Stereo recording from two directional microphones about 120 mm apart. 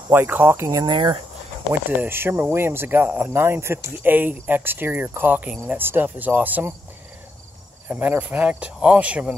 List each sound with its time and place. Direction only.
0.1 s speech: 15° right (ahead or behind)
0.9 s speech: 45° right (ahead or behind)
1.7 s speech: 15° right (ahead or behind)
7.9 s speech: 15° right (ahead or behind)